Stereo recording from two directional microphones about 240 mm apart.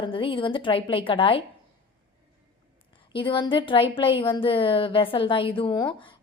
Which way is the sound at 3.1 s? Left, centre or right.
Left.